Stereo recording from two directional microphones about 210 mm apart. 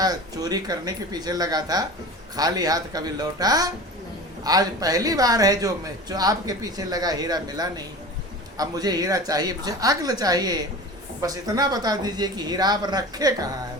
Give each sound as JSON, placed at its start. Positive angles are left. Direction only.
{"t": 0.0, "sound": "speech", "side_deg": -20}